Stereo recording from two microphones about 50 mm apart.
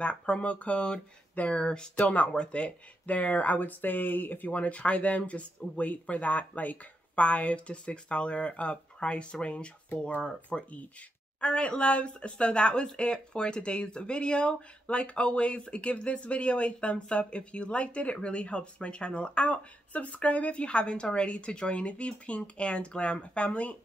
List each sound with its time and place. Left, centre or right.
0.0 s speech: left
2.0 s speech: left
2.2 s speech: centre